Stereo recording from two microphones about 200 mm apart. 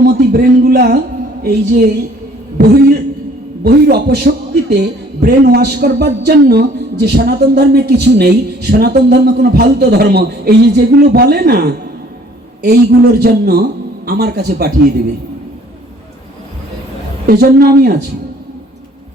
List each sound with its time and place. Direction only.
0.0 s a man's voice: 50° right (ahead or behind)
2.6 s a sound: 55° right (ahead or behind)
3.6 s a man's voice: 55° right (ahead or behind)
17.2 s a man's voice: 50° right (ahead or behind)